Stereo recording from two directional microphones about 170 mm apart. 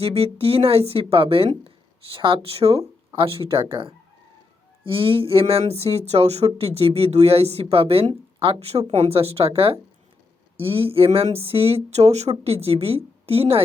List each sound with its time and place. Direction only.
0.0 s speech: 35° right (ahead or behind)